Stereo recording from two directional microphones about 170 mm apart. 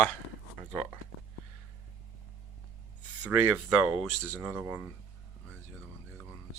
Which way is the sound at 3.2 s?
10° right (ahead or behind).